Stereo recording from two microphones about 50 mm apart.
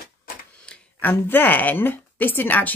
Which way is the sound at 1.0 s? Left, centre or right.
Left.